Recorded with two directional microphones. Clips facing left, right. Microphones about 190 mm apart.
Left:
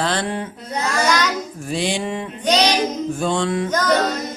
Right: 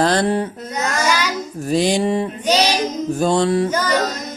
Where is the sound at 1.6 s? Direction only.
40° right (ahead or behind).